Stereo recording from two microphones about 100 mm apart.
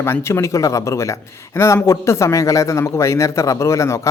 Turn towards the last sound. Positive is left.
turn(degrees=30)  # may be behind; listen again after turning